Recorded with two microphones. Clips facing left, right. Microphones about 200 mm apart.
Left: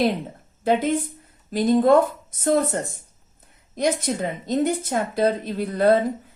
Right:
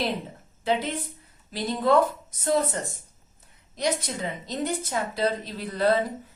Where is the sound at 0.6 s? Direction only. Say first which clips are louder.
Left 6 dB; 50° left (ahead or behind).